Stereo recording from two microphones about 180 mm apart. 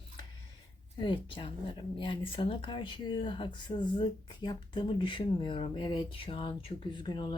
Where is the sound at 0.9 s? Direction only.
25° left (ahead or behind).